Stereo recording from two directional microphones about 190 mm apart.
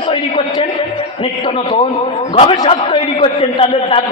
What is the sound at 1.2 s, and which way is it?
A man's voice, 25° left (ahead or behind).